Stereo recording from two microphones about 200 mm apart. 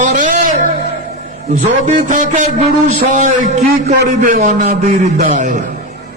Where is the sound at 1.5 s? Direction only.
40° right (ahead or behind).